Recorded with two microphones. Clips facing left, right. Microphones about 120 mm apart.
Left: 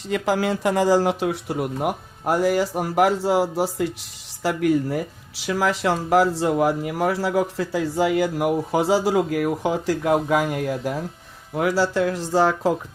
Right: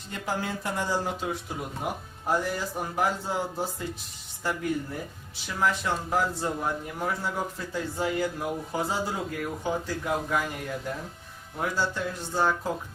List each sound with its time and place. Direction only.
0.1 s speech: 90° left